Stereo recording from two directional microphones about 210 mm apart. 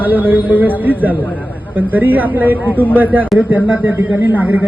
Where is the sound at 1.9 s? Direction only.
10° right (ahead or behind).